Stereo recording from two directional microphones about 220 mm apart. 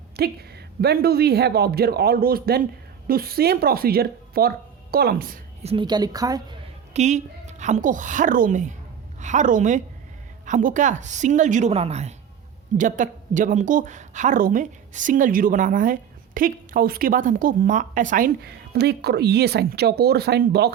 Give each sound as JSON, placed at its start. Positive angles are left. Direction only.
{"t": 0.2, "sound": "speech", "side_deg": -45}
{"t": 5.6, "sound": "a woman's voice", "side_deg": -20}
{"t": 6.9, "sound": "speech", "side_deg": -30}